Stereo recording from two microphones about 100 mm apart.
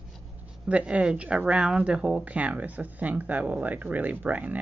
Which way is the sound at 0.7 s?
10° right (ahead or behind).